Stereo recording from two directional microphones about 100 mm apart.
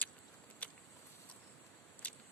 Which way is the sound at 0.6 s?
15° left (ahead or behind).